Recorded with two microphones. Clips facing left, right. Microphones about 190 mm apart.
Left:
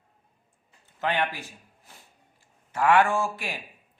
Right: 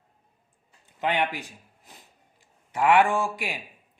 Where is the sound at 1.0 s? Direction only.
15° right (ahead or behind).